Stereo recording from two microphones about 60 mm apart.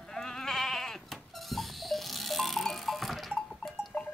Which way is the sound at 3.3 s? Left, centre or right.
Centre.